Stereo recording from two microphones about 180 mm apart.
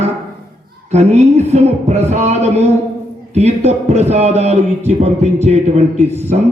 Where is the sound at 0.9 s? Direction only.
35° right (ahead or behind).